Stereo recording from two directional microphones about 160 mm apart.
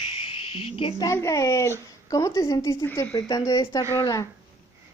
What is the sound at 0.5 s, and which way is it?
Speech, 35° left (ahead or behind).